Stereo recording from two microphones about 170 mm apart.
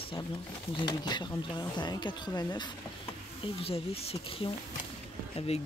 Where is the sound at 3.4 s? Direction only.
35° left (ahead or behind).